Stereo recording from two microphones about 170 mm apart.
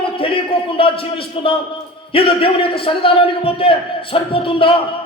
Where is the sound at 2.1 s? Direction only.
30° left (ahead or behind).